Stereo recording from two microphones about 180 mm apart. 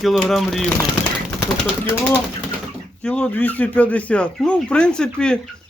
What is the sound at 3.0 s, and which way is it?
Speech, 5° left (ahead or behind).